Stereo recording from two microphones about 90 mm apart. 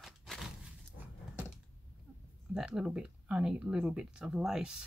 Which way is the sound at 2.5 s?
5° right (ahead or behind).